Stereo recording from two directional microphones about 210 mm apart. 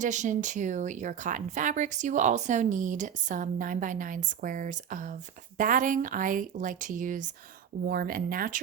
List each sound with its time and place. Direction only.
0.0 s speech: 35° right (ahead or behind)